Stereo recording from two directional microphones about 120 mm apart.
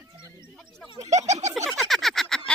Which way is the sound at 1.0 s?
70° right (ahead or behind).